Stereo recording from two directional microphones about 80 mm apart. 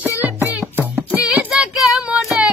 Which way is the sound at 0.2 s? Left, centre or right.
Right.